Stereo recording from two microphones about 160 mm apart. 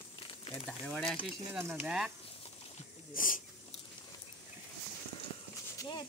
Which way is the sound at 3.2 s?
60° left (ahead or behind).